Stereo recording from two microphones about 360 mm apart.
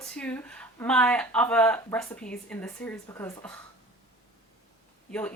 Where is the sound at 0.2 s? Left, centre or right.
Centre.